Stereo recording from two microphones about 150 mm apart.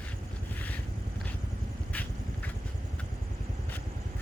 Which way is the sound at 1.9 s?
10° left (ahead or behind).